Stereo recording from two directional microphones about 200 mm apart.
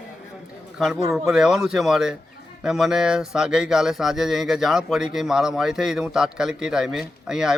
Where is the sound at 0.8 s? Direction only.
Centre (ahead or behind).